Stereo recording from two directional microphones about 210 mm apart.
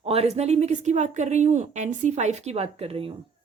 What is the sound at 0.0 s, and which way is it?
Speech, 30° right (ahead or behind).